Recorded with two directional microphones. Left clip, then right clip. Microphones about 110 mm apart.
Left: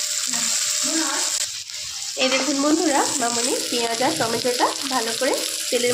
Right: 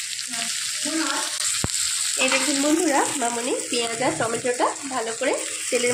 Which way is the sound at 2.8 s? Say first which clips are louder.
Left 1 dB; 10° left (ahead or behind).